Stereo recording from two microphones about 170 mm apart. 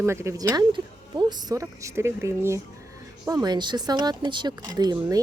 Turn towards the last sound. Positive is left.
turn(degrees=-25)  # may be behind; listen again after turning